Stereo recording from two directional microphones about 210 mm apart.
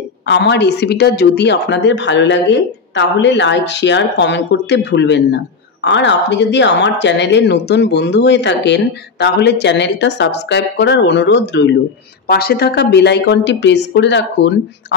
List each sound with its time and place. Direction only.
0.3 s speech: 55° left (ahead or behind)